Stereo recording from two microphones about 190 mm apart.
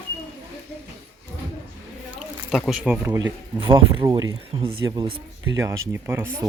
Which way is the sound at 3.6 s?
25° right (ahead or behind).